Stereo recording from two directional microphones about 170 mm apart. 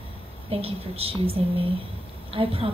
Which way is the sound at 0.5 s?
35° right (ahead or behind).